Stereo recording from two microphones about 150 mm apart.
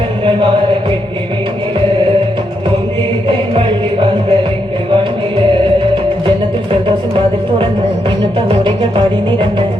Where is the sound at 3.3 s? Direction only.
35° right (ahead or behind).